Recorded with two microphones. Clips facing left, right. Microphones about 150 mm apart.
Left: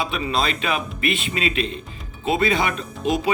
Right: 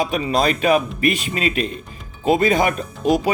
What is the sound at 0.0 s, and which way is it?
Speech, 45° right (ahead or behind).